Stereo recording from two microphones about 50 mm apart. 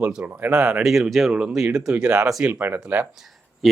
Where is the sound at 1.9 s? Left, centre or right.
Right.